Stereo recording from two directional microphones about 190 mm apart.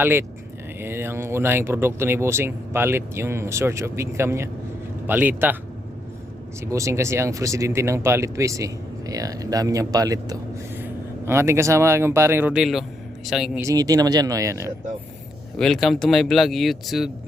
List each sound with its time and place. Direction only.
0.0 s a man's voice: 10° right (ahead or behind)
6.6 s speech: 15° right (ahead or behind)
13.6 s speech: 20° right (ahead or behind)
15.5 s speech: 5° left (ahead or behind)